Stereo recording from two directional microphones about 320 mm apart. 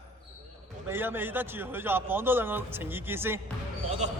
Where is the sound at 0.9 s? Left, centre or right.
Centre.